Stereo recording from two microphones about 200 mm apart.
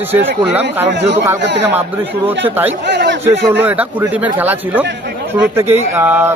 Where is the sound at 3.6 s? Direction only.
10° right (ahead or behind).